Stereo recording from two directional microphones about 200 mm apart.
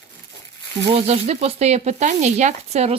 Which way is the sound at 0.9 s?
30° right (ahead or behind).